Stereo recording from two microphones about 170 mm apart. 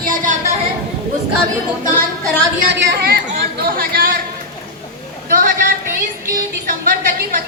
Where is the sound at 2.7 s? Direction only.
75° right (ahead or behind).